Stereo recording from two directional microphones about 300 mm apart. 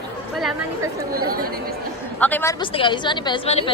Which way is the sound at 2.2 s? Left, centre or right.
Centre.